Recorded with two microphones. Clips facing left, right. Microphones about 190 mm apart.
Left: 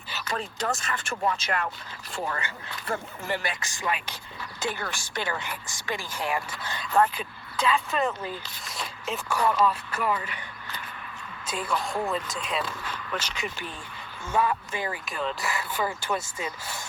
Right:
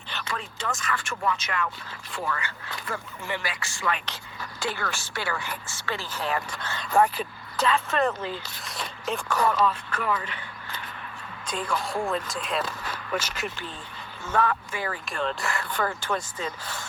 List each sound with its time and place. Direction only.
0.3 s speech: 40° left (ahead or behind)
3.4 s speech: 20° left (ahead or behind)
7.0 s speech: 10° right (ahead or behind)
7.6 s speech: 5° left (ahead or behind)
11.4 s speech: 5° left (ahead or behind)
14.7 s speech: 20° left (ahead or behind)
15.1 s speech: centre (ahead or behind)